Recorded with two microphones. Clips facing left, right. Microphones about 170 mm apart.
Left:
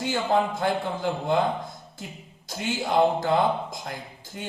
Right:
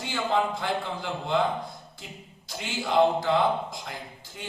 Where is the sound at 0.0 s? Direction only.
45° left (ahead or behind).